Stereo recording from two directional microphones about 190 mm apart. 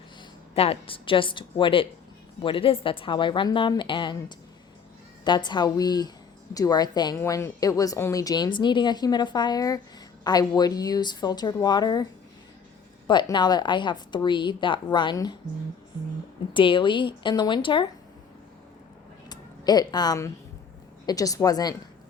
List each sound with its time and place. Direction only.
0.5 s a woman's voice: 30° left (ahead or behind)
5.2 s a woman's voice: 25° left (ahead or behind)
13.1 s a woman's voice: 25° left (ahead or behind)
16.6 s a woman's voice: 25° left (ahead or behind)
19.3 s a woman's voice: 20° left (ahead or behind)